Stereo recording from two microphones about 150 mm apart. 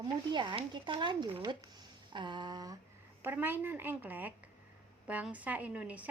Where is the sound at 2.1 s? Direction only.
30° right (ahead or behind).